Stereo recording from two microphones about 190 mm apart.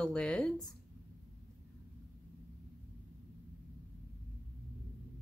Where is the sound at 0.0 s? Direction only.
5° left (ahead or behind).